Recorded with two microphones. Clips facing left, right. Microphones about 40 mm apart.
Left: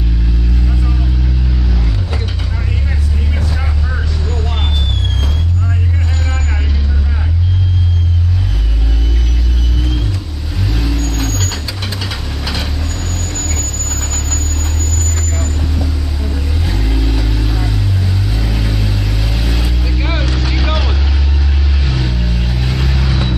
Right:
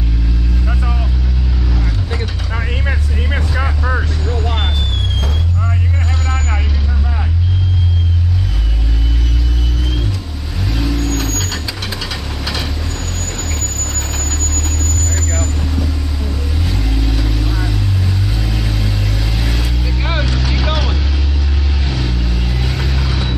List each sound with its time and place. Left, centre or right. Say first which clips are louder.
2.5 s vehicle: right 2 dB; right
4.3 s vehicle: right 3 dB; centre
6.2 s vehicle: right 1 dB; centre
10.8 s vehicle: right 3 dB; centre
13.3 s a sound: left 1 dB; centre
15.1 s vehicle: right 1 dB; centre
21.8 s vehicle: left 2 dB; centre